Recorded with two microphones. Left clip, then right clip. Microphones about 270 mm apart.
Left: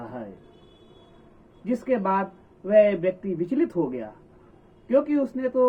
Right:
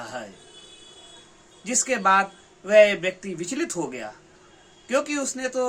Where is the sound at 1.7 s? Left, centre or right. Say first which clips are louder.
Right 4 dB; centre.